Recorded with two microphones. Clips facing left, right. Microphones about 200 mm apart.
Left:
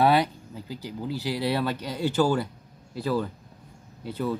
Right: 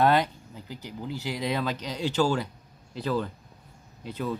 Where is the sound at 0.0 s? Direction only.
10° left (ahead or behind).